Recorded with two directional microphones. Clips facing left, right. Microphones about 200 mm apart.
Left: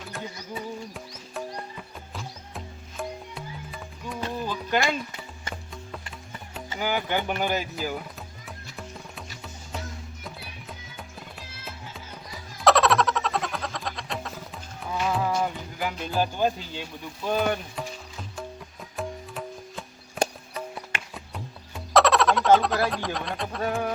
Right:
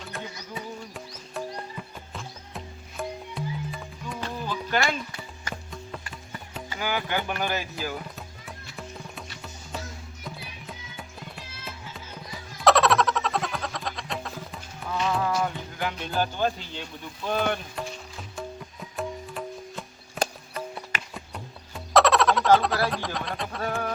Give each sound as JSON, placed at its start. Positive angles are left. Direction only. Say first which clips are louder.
{"t": 0.1, "sound": "music", "louder": "left 2 dB", "side_deg": 0}
{"t": 4.2, "sound": "music", "louder": "left 2 dB", "side_deg": 15}
{"t": 6.7, "sound": "speech", "louder": "left 2 dB", "side_deg": 15}
{"t": 8.4, "sound": "music", "louder": "even", "side_deg": 0}
{"t": 12.6, "sound": "a sound", "louder": "even", "side_deg": 0}
{"t": 14.8, "sound": "music", "louder": "even", "side_deg": 5}
{"t": 21.9, "sound": "a sound", "louder": "even", "side_deg": 0}